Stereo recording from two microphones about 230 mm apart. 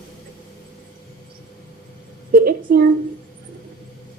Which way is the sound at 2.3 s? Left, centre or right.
Right.